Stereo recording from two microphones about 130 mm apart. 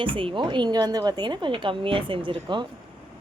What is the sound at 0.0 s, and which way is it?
A woman's voice, 40° right (ahead or behind).